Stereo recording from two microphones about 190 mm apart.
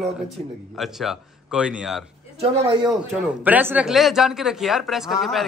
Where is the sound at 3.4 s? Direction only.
10° right (ahead or behind).